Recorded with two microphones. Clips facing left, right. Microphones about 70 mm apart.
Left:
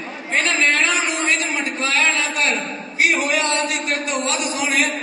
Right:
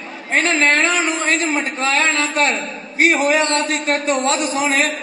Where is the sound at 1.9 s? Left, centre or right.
Right.